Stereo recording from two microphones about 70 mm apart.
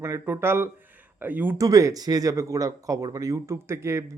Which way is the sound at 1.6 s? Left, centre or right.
Right.